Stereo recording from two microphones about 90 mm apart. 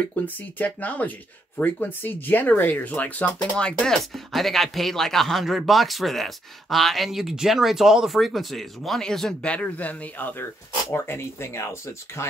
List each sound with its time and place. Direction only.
0.0 s speech: 15° left (ahead or behind)